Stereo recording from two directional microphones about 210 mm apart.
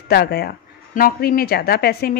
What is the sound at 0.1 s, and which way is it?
A woman's voice, 50° left (ahead or behind).